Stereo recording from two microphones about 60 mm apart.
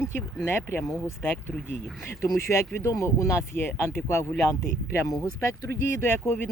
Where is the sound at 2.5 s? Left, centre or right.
Left.